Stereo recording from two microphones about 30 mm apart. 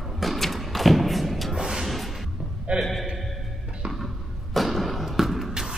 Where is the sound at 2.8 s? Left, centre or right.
Centre.